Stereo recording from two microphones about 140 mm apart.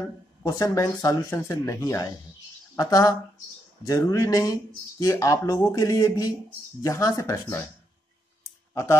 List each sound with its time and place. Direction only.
0.0 s speech: 25° left (ahead or behind)